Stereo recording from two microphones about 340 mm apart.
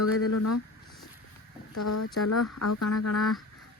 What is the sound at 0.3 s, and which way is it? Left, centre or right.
Speech, left.